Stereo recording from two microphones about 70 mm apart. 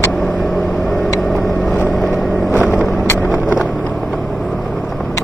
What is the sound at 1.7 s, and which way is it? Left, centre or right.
Vehicle, centre.